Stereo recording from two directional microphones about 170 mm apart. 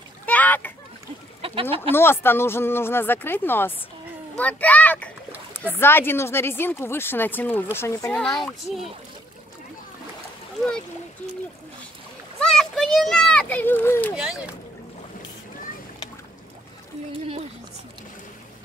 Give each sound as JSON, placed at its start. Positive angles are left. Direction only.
{"t": 0.3, "sound": "splash", "side_deg": 10}
{"t": 1.4, "sound": "speech", "side_deg": -35}
{"t": 1.8, "sound": "a child's voice", "side_deg": 15}
{"t": 12.4, "sound": "a sound", "side_deg": 5}
{"t": 14.1, "sound": "a child's voice", "side_deg": -5}